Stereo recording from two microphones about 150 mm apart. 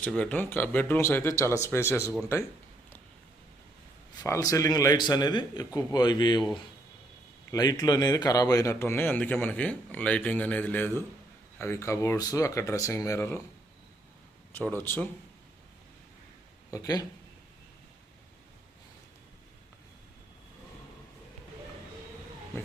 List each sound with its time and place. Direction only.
0.1 s speech: 10° left (ahead or behind)
4.2 s a man's voice: 20° left (ahead or behind)
7.5 s a man's voice: 25° left (ahead or behind)
14.5 s speech: 10° left (ahead or behind)
16.7 s a man's voice: 25° left (ahead or behind)